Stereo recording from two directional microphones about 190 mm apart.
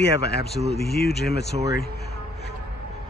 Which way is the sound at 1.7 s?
55° left (ahead or behind).